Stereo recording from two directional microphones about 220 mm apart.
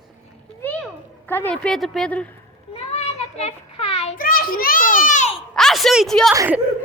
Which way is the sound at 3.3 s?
25° left (ahead or behind).